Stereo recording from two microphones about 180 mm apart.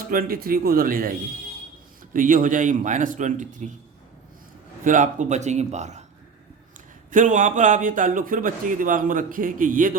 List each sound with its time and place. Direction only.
0.1 s a man's voice: 55° right (ahead or behind)
2.1 s a man's voice: 45° right (ahead or behind)
4.8 s a man's voice: 45° right (ahead or behind)
7.1 s a man's voice: 45° right (ahead or behind)